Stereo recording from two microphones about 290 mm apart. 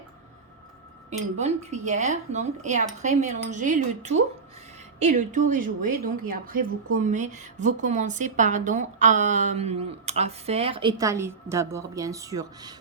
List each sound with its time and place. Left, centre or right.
1.4 s speech: right